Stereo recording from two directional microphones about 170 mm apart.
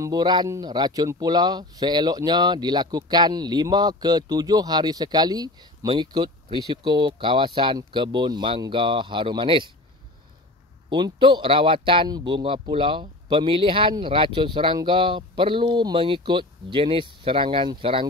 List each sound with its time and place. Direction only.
0.0 s speech: 25° right (ahead or behind)
10.9 s speech: 25° right (ahead or behind)